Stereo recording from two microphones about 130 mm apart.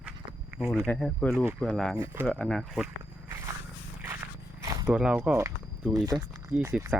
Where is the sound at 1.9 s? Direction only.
25° right (ahead or behind).